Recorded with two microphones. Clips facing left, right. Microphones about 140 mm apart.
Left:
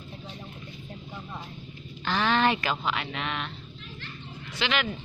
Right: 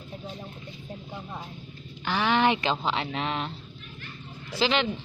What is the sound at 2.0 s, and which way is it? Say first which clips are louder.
Speech: right 1 dB; 15° right (ahead or behind).